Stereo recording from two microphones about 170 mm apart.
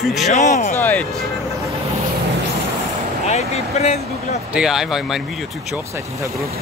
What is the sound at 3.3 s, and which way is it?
Speech, 40° left (ahead or behind).